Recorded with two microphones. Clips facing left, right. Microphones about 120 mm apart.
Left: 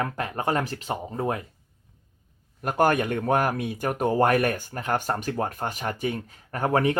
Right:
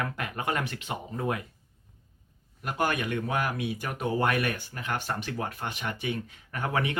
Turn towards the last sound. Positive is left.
turn(degrees=40)  # may be behind; listen again after turning